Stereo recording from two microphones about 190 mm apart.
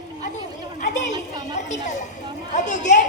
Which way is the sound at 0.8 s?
40° left (ahead or behind).